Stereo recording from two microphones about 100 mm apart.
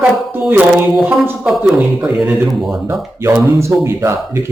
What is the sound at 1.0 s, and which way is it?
Speech, 20° right (ahead or behind).